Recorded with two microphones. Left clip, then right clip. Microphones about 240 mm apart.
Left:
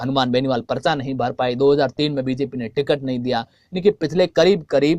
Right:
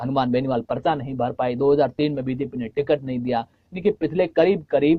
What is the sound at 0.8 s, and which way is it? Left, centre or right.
Speech, left.